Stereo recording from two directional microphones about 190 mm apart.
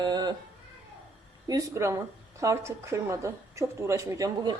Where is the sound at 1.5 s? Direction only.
15° right (ahead or behind).